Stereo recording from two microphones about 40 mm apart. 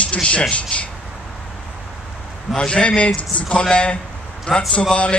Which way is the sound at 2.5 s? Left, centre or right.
Left.